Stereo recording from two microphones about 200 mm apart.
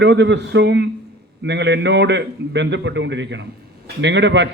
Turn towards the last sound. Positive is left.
turn(degrees=-65)  # may be behind; listen again after turning